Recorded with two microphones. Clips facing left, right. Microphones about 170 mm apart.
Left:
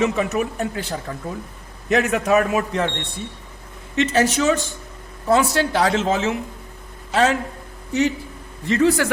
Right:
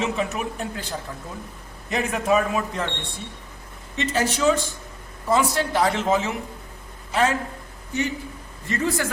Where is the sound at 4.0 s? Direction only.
75° left (ahead or behind).